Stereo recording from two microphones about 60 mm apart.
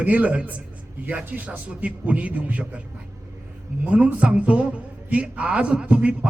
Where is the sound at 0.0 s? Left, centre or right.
Right.